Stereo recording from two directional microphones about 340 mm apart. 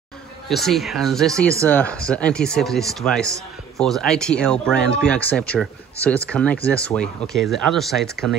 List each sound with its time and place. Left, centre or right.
0.5 s speech: centre